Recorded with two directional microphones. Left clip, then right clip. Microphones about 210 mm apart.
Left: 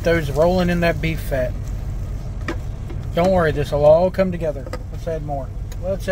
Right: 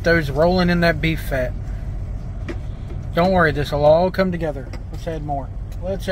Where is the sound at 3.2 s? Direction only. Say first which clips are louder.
Even; 10° left (ahead or behind).